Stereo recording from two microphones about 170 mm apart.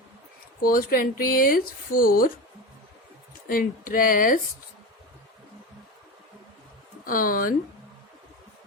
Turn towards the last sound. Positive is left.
turn(degrees=55)  # may be behind; listen again after turning